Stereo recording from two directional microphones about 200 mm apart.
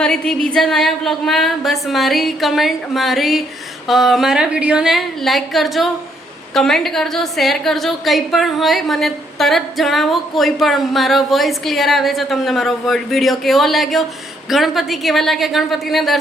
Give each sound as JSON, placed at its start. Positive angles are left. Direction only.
{"t": 0.0, "sound": "a woman's voice", "side_deg": 5}